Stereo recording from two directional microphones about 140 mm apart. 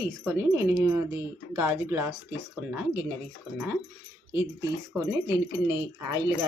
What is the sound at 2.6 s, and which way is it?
Speech, 5° right (ahead or behind).